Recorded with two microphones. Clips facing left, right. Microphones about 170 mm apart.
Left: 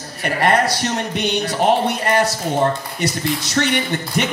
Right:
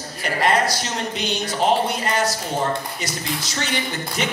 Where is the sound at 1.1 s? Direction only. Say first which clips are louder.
Left 5 dB; 60° left (ahead or behind).